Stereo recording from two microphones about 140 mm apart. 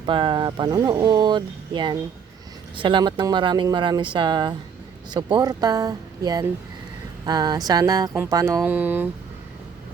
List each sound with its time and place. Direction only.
0.0 s speech: 35° right (ahead or behind)
8.6 s speech: 10° right (ahead or behind)